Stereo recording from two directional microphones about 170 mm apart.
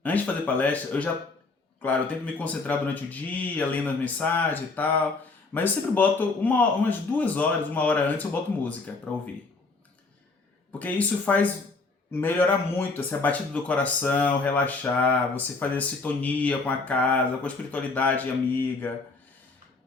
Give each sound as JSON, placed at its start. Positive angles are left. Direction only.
{"t": 0.0, "sound": "speech", "side_deg": 10}
{"t": 10.7, "sound": "speech", "side_deg": 10}
{"t": 12.9, "sound": "speech", "side_deg": 10}